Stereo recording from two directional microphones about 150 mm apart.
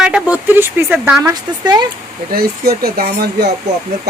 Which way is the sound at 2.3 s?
85° right.